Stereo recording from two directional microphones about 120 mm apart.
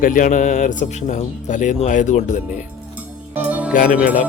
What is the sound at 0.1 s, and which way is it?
Speech, 90° left.